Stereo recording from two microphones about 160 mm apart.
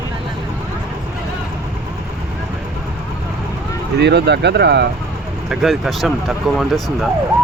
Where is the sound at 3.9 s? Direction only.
90° right.